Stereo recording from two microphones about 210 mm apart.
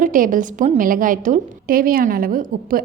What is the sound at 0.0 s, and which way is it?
A woman's voice, 40° right (ahead or behind).